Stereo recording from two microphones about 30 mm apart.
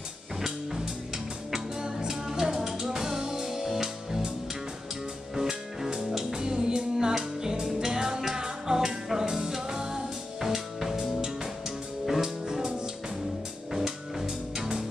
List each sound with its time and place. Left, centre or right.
0.4 s music: centre
5.3 s music: centre
5.9 s music: right